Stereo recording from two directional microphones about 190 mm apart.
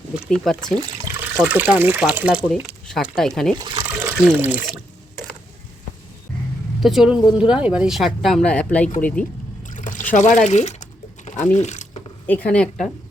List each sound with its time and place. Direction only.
0.3 s speech: centre (ahead or behind)
0.8 s water: 15° right (ahead or behind)
1.4 s speech: 5° right (ahead or behind)
3.9 s water: 10° right (ahead or behind)
6.7 s speech: centre (ahead or behind)
9.6 s boat: 40° left (ahead or behind)
10.1 s speech: 40° left (ahead or behind)
12.2 s speech: 10° left (ahead or behind)